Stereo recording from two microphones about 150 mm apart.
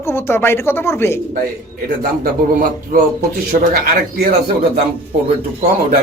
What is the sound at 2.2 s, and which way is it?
Speech, 75° right (ahead or behind).